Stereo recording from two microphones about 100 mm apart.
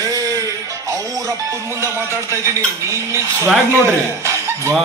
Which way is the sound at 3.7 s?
25° right (ahead or behind).